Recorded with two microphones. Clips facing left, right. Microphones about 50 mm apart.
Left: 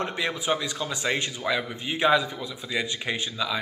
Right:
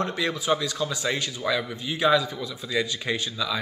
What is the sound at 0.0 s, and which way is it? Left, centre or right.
Speech, left.